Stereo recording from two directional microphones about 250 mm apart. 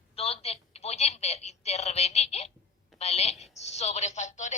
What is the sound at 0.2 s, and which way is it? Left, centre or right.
A woman's voice, left.